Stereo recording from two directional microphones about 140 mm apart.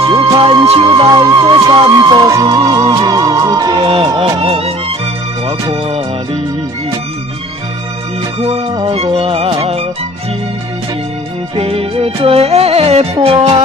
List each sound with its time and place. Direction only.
0.0 s music: 25° right (ahead or behind)
3.7 s speech: 40° right (ahead or behind)
5.7 s music: 45° right (ahead or behind)
8.4 s music: 45° right (ahead or behind)
11.5 s music: 45° right (ahead or behind)